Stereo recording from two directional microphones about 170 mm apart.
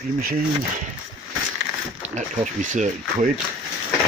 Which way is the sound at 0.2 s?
60° right (ahead or behind).